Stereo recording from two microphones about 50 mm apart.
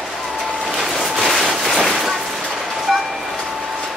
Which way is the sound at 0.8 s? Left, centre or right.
Centre.